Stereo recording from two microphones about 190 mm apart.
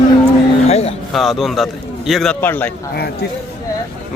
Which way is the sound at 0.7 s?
35° left (ahead or behind).